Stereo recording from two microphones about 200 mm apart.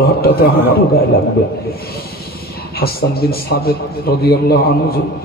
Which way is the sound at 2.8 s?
50° left (ahead or behind).